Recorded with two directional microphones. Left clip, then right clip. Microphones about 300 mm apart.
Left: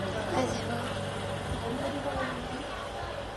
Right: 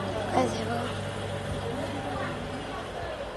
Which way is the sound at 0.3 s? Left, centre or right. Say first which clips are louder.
Right 5 dB; centre.